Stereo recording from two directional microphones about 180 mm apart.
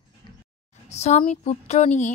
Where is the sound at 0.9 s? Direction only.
35° left (ahead or behind).